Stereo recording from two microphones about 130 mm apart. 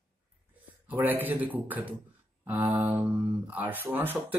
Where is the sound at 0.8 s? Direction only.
15° right (ahead or behind).